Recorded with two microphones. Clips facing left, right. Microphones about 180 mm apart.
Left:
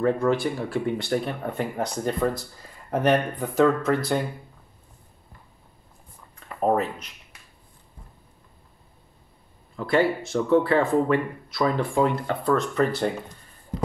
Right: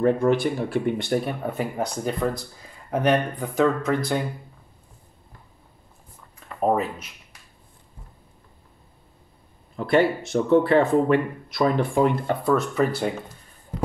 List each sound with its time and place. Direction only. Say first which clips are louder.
0.0 s speech: right 2 dB; 20° right (ahead or behind); by 4.2 s centre (ahead or behind)
6.7 s speech: left 1 dB; 5° right (ahead or behind)
9.8 s speech: right 2 dB; 20° right (ahead or behind)
12.5 s speech: right 1 dB; 5° right (ahead or behind)